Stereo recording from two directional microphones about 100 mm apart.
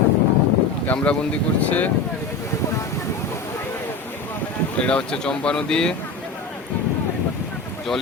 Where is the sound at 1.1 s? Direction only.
15° left (ahead or behind).